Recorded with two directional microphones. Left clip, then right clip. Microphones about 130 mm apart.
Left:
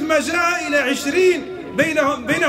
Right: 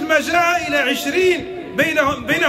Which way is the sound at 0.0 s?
5° left (ahead or behind).